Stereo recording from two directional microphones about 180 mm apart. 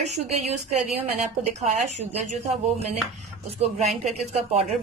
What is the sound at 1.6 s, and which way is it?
A woman's voice, 40° right (ahead or behind).